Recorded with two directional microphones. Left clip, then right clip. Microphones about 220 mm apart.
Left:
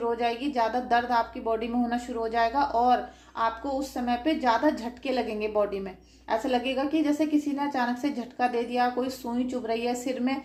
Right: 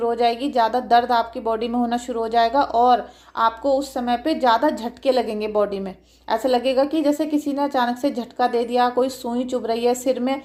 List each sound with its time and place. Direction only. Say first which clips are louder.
0.0 s speech: right 8 dB; 40° right (ahead or behind)